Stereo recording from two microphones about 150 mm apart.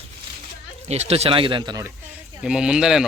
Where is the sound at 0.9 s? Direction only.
45° right (ahead or behind); by 1.9 s 25° right (ahead or behind).